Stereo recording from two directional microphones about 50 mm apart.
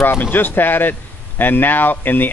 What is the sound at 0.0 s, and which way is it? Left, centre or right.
Speech, left.